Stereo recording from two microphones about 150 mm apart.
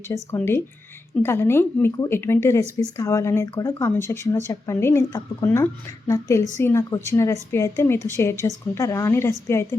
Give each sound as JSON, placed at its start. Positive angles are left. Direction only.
{"t": 0.1, "sound": "a woman's voice", "side_deg": 15}